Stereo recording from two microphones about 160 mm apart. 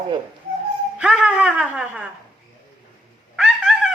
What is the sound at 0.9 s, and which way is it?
Speech, 10° right (ahead or behind).